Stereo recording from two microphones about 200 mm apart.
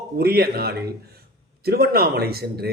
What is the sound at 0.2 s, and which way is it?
A man's voice, 50° right (ahead or behind).